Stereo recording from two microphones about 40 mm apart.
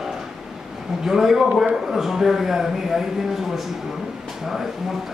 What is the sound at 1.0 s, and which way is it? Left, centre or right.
A man's voice, centre.